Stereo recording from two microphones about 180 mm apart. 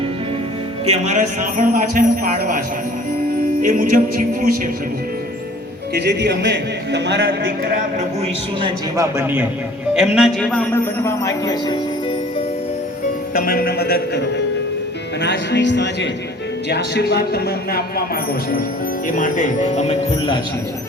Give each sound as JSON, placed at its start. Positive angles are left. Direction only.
{"t": 0.9, "sound": "a man's voice", "side_deg": -40}
{"t": 3.6, "sound": "a man's voice", "side_deg": -45}
{"t": 5.9, "sound": "speech", "side_deg": -65}
{"t": 8.6, "sound": "a man's voice", "side_deg": -15}
{"t": 13.3, "sound": "a man's voice", "side_deg": 55}
{"t": 19.0, "sound": "speech", "side_deg": 45}